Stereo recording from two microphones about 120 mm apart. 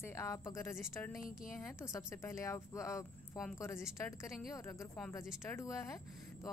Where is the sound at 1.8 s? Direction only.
25° left (ahead or behind).